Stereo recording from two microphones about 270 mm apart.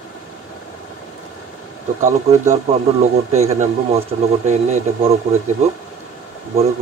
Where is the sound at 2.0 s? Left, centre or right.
Right.